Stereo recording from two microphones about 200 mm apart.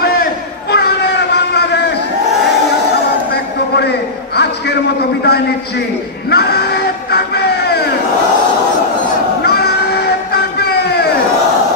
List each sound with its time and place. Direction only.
0.2 s a sound: 55° left (ahead or behind)
6.3 s music: 55° left (ahead or behind)
9.4 s vehicle: 55° left (ahead or behind)